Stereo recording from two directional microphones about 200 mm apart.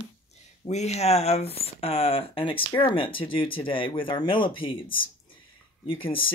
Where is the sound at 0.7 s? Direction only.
35° left (ahead or behind).